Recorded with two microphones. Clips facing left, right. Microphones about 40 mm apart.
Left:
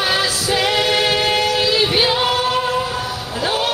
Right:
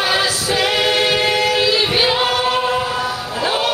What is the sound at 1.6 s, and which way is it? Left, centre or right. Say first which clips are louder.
Singing: even; centre.